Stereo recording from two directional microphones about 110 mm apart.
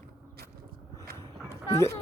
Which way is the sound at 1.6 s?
25° left (ahead or behind).